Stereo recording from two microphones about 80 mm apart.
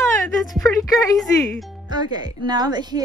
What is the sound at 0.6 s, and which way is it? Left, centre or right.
Speech, left.